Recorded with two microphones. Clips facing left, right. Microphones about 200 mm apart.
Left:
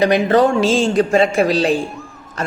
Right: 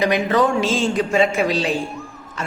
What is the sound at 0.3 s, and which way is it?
A man's voice, 35° left (ahead or behind).